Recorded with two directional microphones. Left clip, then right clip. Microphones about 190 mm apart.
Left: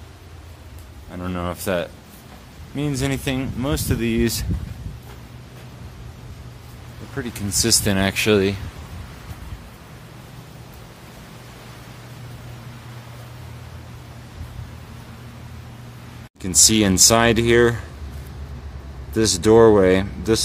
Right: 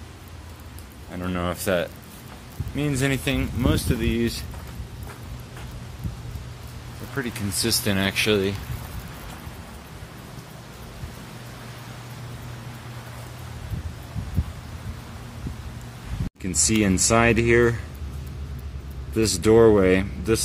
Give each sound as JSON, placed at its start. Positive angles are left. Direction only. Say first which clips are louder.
{"t": 1.1, "sound": "speech", "louder": "even", "side_deg": 10}
{"t": 7.2, "sound": "speech", "louder": "even", "side_deg": 15}
{"t": 7.5, "sound": "speech", "louder": "left 5 dB", "side_deg": 30}
{"t": 16.4, "sound": "speech", "louder": "left 6 dB", "side_deg": 5}
{"t": 19.1, "sound": "speech", "louder": "left 3 dB", "side_deg": 5}